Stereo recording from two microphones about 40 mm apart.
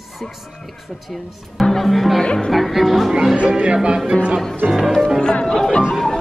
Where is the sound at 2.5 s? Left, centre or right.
Centre.